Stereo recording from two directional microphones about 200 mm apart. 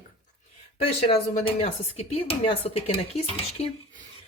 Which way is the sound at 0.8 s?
30° left (ahead or behind).